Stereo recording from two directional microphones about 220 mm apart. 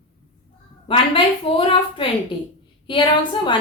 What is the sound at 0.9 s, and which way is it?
A woman's voice, 25° left (ahead or behind).